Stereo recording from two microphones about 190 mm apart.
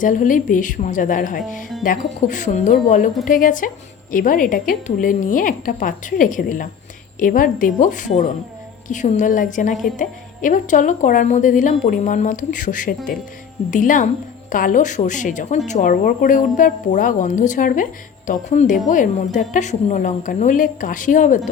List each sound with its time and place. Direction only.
0.0 s a woman's voice: 45° left (ahead or behind)